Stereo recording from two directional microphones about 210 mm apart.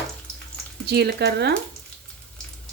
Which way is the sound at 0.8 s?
50° right (ahead or behind).